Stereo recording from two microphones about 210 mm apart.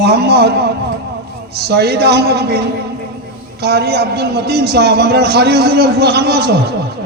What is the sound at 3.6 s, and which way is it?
A man's voice, 50° right (ahead or behind).